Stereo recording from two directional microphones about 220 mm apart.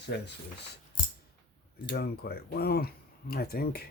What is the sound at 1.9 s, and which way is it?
Speech, 45° left (ahead or behind).